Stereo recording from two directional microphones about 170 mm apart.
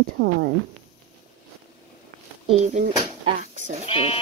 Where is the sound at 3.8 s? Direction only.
35° left (ahead or behind).